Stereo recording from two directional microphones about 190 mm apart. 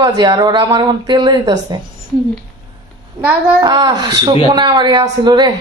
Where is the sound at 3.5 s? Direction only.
20° right (ahead or behind).